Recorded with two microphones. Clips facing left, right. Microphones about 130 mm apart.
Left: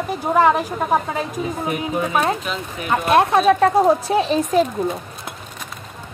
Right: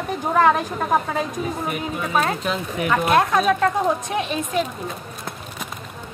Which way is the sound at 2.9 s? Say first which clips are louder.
Left 2 dB; 25° left (ahead or behind).